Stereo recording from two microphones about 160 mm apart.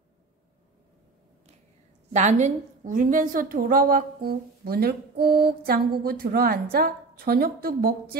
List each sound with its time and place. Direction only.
2.1 s a woman's voice: 45° right (ahead or behind); by 8.2 s 70° right (ahead or behind)